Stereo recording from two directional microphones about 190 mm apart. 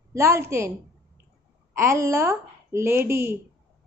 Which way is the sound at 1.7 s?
15° right (ahead or behind).